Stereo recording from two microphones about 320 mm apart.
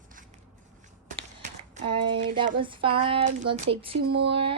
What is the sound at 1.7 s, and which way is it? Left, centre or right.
Speech, centre.